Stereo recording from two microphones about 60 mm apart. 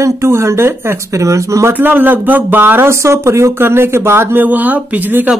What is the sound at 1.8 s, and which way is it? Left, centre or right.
Speech, right.